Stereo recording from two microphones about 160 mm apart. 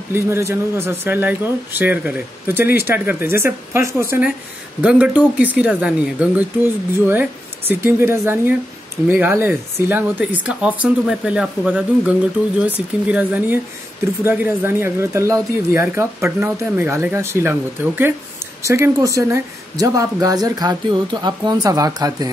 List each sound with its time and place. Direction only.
0.1 s speech: 15° right (ahead or behind)